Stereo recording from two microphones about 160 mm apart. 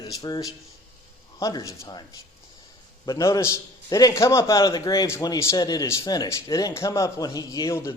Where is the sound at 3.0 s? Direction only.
20° left (ahead or behind).